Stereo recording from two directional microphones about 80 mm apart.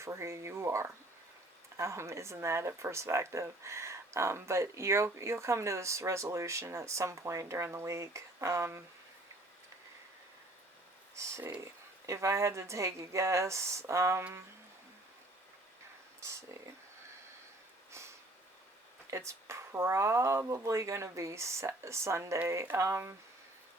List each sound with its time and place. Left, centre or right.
0.0 s speech: right
11.1 s speech: right
16.2 s speech: right
19.1 s speech: right